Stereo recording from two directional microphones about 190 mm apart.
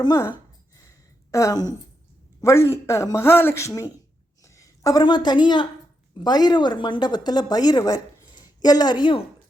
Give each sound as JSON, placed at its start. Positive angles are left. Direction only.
{"t": 0.0, "sound": "a woman's voice", "side_deg": 15}